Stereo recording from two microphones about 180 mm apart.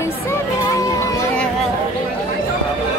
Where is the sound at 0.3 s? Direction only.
15° left (ahead or behind).